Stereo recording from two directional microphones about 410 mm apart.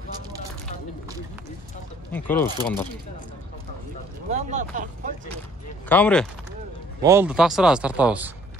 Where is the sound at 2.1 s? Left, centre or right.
Centre.